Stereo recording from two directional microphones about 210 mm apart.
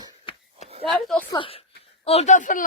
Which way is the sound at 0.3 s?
25° left (ahead or behind).